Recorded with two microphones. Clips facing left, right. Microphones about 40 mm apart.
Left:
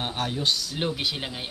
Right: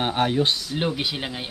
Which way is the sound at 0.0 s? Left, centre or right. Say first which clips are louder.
Right 6 dB; right.